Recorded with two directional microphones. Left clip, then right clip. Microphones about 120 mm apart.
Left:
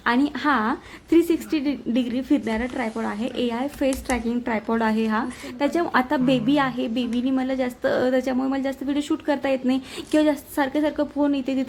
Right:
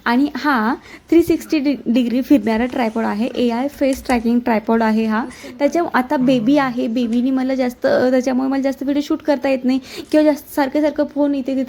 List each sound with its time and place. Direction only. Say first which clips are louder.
0.0 s a woman's voice: right 4 dB; 25° right (ahead or behind); by 3.2 s 50° right (ahead or behind)
3.2 s a woman's voice: right 7 dB; 35° right (ahead or behind)
4.1 s a woman's voice: right 8 dB; 45° right (ahead or behind); by 11.6 s 15° right (ahead or behind)